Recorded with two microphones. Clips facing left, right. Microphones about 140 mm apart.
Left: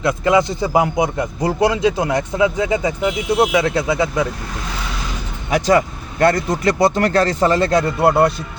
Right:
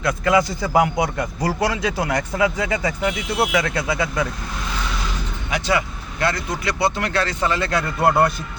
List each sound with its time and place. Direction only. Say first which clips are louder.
0.0 s speech: left 3 dB; 25° left (ahead or behind)
5.5 s speech: left 7 dB; 45° left (ahead or behind)
8.0 s speech: left 2 dB; 25° left (ahead or behind)